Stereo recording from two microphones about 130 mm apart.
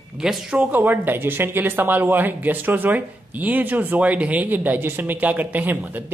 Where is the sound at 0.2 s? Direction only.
5° right (ahead or behind).